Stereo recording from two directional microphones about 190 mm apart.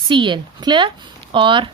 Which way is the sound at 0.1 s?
25° right (ahead or behind).